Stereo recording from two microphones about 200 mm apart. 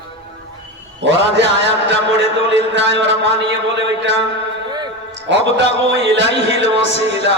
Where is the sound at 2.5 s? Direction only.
65° right (ahead or behind).